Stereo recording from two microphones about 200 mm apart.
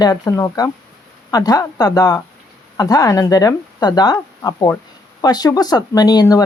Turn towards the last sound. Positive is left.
turn(degrees=20)  # may be behind; listen again after turning